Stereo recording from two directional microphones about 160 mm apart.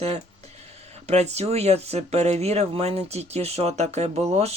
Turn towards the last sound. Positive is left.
turn(degrees=-40)  # may be behind; listen again after turning